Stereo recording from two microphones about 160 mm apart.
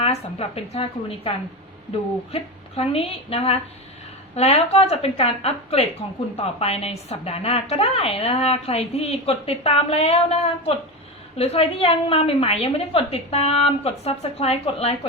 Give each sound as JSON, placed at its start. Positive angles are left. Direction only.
{"t": 0.0, "sound": "a woman's voice", "side_deg": 40}
{"t": 2.3, "sound": "a woman's voice", "side_deg": 40}